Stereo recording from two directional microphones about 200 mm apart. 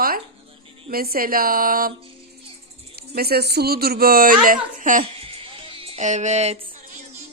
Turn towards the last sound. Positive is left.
turn(degrees=-30)  # may be behind; listen again after turning